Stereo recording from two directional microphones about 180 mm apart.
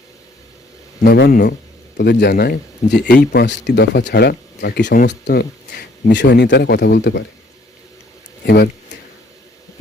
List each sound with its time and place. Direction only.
1.0 s speech: 60° left (ahead or behind)
2.0 s speech: 65° left (ahead or behind)
8.4 s speech: 65° left (ahead or behind)